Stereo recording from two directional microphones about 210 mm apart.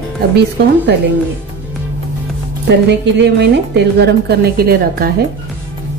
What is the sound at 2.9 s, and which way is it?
A woman's voice, 55° right (ahead or behind).